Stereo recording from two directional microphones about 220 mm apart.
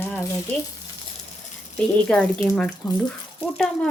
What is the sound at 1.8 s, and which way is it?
A woman's voice, 5° left (ahead or behind).